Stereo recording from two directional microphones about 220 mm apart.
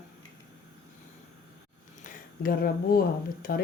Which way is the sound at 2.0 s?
40° left (ahead or behind).